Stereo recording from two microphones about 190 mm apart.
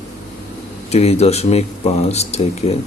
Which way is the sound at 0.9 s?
35° left (ahead or behind).